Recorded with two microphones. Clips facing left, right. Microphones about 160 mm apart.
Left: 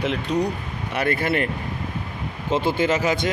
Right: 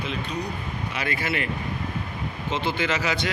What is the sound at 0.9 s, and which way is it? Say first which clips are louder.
Speech: left 7 dB; 60° left (ahead or behind).